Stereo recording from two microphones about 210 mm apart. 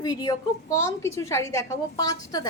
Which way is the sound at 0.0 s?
20° left (ahead or behind).